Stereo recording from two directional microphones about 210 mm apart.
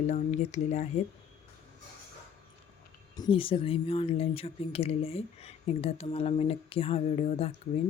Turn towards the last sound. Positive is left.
turn(degrees=30)  # may be behind; listen again after turning